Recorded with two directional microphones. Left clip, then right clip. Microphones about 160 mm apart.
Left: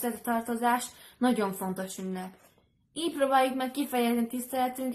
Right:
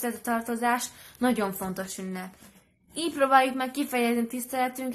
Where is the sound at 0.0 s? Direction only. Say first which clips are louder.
Right 1 dB; 25° right (ahead or behind).